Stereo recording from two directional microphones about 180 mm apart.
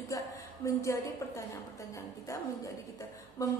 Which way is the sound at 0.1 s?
20° left (ahead or behind).